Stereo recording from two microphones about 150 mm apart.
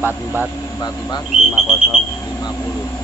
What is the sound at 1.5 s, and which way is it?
Speech, 5° right (ahead or behind).